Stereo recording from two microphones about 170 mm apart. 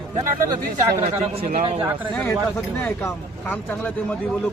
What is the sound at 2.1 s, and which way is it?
Speech, 15° left (ahead or behind).